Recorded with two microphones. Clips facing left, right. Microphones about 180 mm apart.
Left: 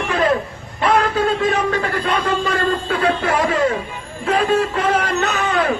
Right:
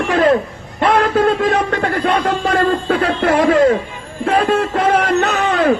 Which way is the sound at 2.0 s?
55° right (ahead or behind).